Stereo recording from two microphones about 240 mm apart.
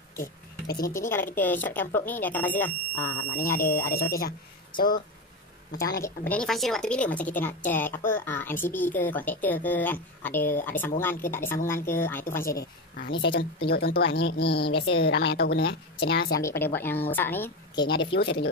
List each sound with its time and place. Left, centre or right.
0.2 s speech: left
0.9 s a woman's voice: centre
3.0 s speech: left
6.0 s a woman's voice: centre
12.4 s speech: left
16.4 s a woman's voice: centre
17.8 s speech: left